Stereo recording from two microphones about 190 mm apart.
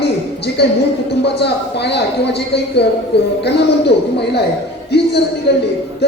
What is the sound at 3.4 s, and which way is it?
A woman's voice, 60° left (ahead or behind).